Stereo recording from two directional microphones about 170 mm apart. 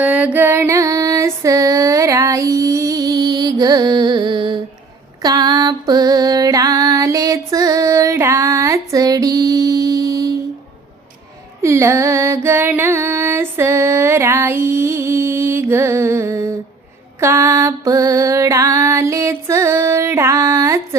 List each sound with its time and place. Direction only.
0.0 s female singing: 10° right (ahead or behind); by 4.5 s 25° right (ahead or behind)
5.2 s music: 20° right (ahead or behind)
11.6 s music: 15° right (ahead or behind)